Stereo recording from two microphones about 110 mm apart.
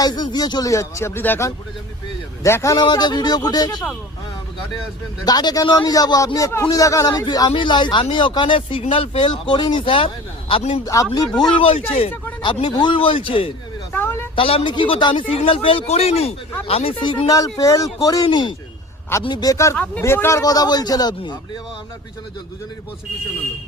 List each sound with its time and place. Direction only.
0.0 s speech: 40° left (ahead or behind)
2.8 s speech: 40° left (ahead or behind)
5.2 s speech: 40° left (ahead or behind)
10.8 s speech: 35° left (ahead or behind)
11.5 s a man's voice: 55° left (ahead or behind)
12.4 s speech: 45° left (ahead or behind)
13.9 s a sound: 20° left (ahead or behind)
14.3 s a man's voice: 55° left (ahead or behind)
17.0 s speech: 40° left (ahead or behind); by 20.4 s 25° left (ahead or behind)
20.4 s speech: 35° left (ahead or behind)